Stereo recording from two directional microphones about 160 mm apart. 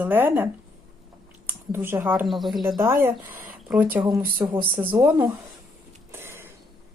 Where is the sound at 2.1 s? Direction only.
Centre (ahead or behind).